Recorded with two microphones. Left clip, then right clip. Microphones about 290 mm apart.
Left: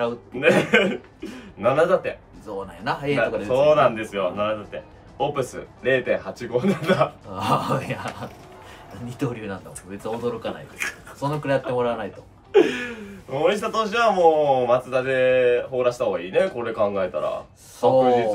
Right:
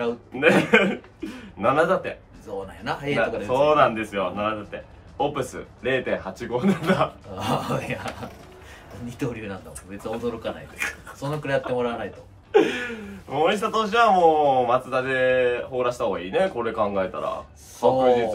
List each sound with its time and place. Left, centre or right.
0.4 s speech: centre
2.4 s speech: centre
3.2 s speech: centre
7.3 s speech: centre
11.1 s speech: centre
12.5 s a man's voice: centre